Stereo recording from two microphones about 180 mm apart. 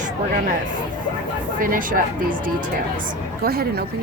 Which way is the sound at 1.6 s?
50° right (ahead or behind).